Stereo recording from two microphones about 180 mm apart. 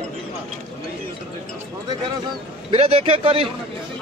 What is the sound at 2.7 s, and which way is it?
Speech, 35° right (ahead or behind).